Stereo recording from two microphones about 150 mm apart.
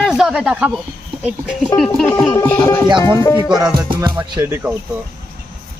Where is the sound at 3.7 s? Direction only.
30° right (ahead or behind).